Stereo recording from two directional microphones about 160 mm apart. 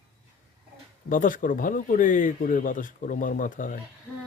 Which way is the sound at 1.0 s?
55° left (ahead or behind).